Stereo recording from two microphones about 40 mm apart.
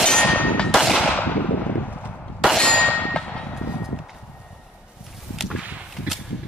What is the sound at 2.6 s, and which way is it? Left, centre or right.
Clang, centre.